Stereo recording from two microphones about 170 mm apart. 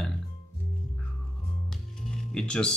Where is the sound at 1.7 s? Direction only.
5° left (ahead or behind).